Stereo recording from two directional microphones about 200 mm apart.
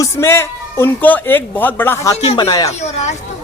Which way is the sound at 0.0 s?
15° left (ahead or behind).